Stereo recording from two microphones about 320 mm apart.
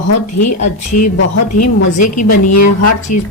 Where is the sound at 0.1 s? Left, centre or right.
Left.